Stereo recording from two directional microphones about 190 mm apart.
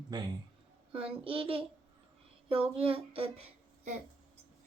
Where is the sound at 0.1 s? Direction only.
20° right (ahead or behind).